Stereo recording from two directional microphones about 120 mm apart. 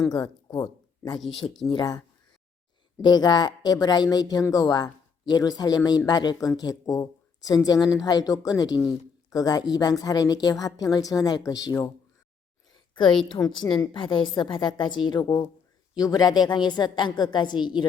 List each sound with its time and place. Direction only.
0.1 s speech: 35° left (ahead or behind)
3.0 s speech: 35° left (ahead or behind)
13.3 s speech: 35° left (ahead or behind)